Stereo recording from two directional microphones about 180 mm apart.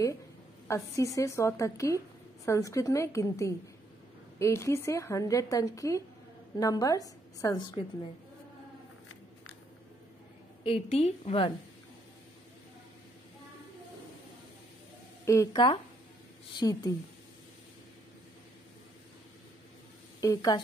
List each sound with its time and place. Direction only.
0.7 s a woman's voice: 15° left (ahead or behind)
10.6 s a woman's voice: 30° left (ahead or behind)
15.2 s a woman's voice: 15° left (ahead or behind)
20.2 s a woman's voice: 20° left (ahead or behind)